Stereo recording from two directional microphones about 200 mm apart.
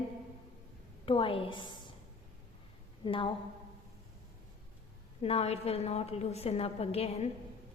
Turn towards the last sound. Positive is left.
turn(degrees=30)  # may be behind; listen again after turning